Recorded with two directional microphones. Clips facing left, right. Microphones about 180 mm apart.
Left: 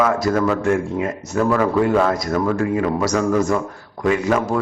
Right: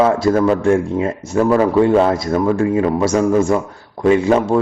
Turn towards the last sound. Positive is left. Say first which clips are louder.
# right 5 dB
turn(degrees=-30)  # may be behind; listen again after turning